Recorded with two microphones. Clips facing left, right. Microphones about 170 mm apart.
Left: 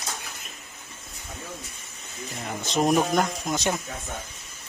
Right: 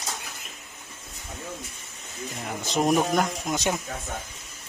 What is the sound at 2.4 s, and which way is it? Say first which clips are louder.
Speech: left 1 dB; 5° right (ahead or behind).